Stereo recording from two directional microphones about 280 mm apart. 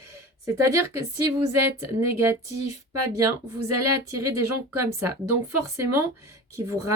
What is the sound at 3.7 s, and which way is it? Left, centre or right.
Speech, right.